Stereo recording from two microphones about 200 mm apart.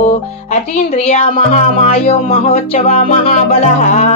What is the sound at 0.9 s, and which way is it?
Speech, 30° left (ahead or behind).